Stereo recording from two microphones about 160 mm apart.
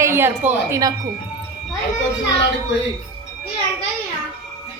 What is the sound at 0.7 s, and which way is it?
Speech, 20° right (ahead or behind).